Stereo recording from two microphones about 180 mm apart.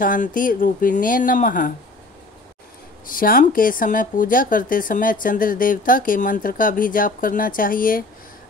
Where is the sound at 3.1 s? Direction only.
50° left (ahead or behind).